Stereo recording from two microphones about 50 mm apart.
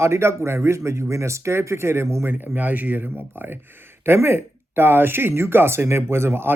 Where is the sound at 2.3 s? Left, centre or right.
Right.